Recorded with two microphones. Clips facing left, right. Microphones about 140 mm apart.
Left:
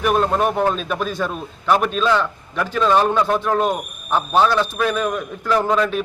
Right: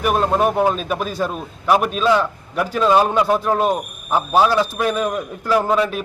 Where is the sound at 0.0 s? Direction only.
5° right (ahead or behind).